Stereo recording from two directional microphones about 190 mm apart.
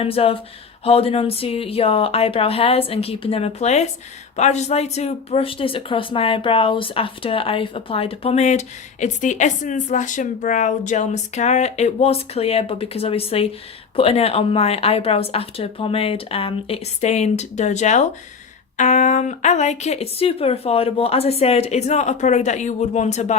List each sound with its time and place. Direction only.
0.0 s speech: 30° left (ahead or behind)